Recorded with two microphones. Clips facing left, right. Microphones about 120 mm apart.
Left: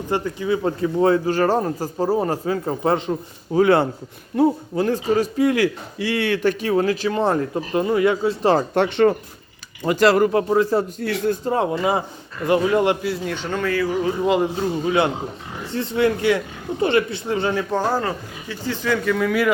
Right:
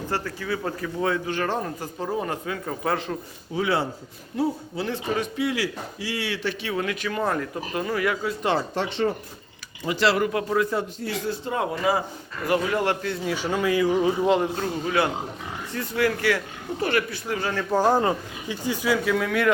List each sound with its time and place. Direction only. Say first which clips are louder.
0.1 s a man's voice: left 8 dB; 20° left (ahead or behind)
3.5 s a man's voice: left 9 dB; 50° left (ahead or behind); by 8.6 s 35° left (ahead or behind)
8.7 s speech: left 8 dB; 60° left (ahead or behind)
9.8 s a man's voice: left 6 dB; 50° left (ahead or behind); by 10.8 s 30° left (ahead or behind)
11.0 s speech: left 7 dB; 60° left (ahead or behind)
11.4 s speech: left 2 dB; 30° left (ahead or behind)
13.1 s speech: left 2 dB; centre (ahead or behind); by 14.1 s 15° right (ahead or behind)
14.2 s speech: left 2 dB; 5° left (ahead or behind)
15.7 s speech: left 5 dB; 25° left (ahead or behind)
17.7 s speech: right 1 dB; 15° right (ahead or behind); by 19.5 s centre (ahead or behind)